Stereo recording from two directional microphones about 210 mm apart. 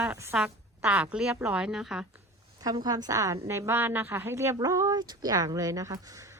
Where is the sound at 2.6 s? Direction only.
20° right (ahead or behind).